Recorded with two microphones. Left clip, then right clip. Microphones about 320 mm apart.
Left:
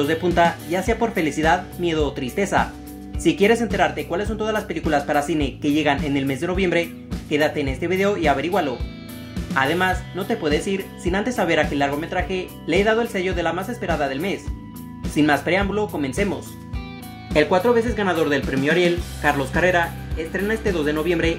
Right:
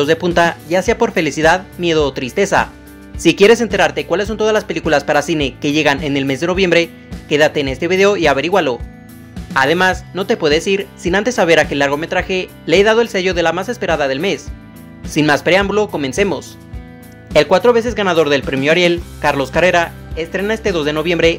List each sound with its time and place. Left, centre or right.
0.0 s speech: right